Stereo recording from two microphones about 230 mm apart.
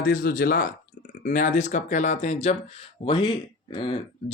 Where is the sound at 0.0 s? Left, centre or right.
Left.